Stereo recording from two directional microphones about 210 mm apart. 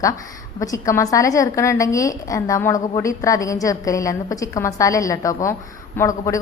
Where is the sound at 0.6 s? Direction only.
15° left (ahead or behind).